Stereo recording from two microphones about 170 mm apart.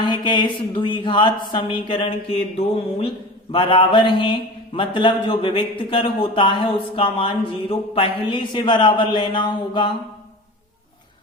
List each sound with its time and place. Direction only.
0.0 s a man's voice: 25° left (ahead or behind)